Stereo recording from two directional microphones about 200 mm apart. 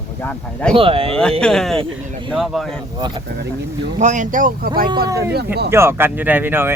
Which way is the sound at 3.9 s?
40° right (ahead or behind).